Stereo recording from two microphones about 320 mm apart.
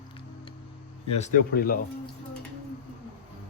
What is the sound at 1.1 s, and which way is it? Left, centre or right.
Speech, left.